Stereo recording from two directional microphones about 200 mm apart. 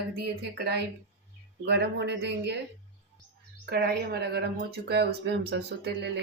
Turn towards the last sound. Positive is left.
turn(degrees=-55)  # may be behind; listen again after turning